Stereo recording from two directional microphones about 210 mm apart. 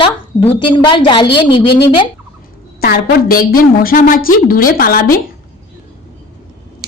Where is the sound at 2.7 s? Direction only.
45° left (ahead or behind).